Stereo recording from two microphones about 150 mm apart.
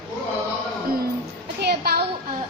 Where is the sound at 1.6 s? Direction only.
90° right.